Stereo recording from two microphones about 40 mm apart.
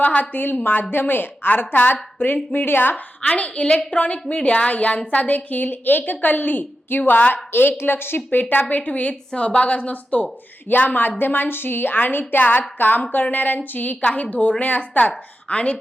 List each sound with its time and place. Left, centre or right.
0.0 s a woman's voice: left
0.6 s a woman's voice: left
1.5 s a woman's voice: left
2.1 s a woman's voice: left
2.6 s a woman's voice: left
2.9 s a woman's voice: left
7.5 s a woman's voice: left
10.7 s a woman's voice: left